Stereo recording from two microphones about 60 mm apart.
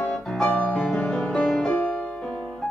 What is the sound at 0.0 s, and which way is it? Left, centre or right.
Piano, centre.